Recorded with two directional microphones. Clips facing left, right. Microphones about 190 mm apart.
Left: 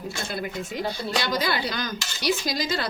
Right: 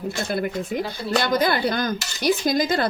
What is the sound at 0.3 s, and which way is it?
Speech, 55° right (ahead or behind).